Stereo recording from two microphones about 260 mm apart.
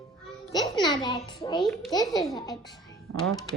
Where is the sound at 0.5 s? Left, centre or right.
Centre.